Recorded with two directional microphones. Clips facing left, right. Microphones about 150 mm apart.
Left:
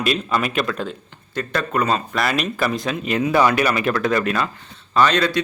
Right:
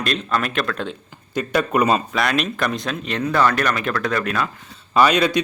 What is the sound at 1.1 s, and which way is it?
Speech, 10° right (ahead or behind).